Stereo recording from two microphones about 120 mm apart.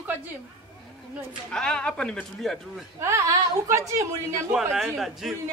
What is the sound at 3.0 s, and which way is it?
Speech, 25° right (ahead or behind).